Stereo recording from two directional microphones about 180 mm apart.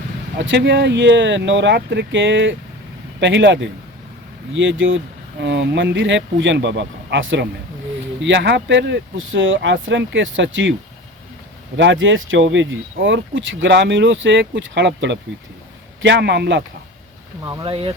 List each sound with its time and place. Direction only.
0.3 s speech: 80° right
5.4 s speech: 80° right
11.8 s a man's voice: 90° right; by 16.6 s 70° right (ahead or behind)
17.4 s speech: 20° right (ahead or behind)